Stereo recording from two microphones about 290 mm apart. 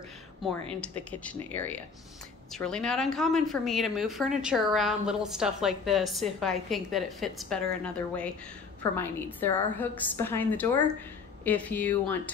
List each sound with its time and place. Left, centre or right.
0.4 s a woman's voice: centre